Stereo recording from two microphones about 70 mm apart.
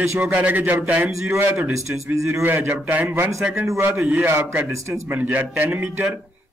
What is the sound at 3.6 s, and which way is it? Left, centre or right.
Speech, right.